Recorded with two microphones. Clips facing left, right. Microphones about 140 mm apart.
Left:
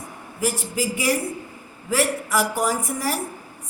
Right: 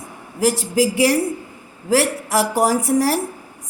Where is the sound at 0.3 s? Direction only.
80° right.